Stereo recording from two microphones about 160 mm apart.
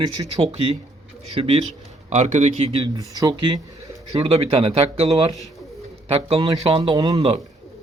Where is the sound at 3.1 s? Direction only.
20° right (ahead or behind).